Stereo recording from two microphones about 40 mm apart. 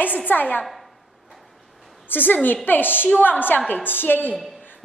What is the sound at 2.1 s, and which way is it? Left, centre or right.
A woman's voice, left.